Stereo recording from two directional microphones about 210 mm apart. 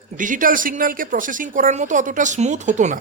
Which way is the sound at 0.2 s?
40° right (ahead or behind).